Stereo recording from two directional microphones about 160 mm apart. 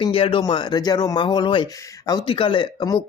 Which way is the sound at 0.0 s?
30° left (ahead or behind).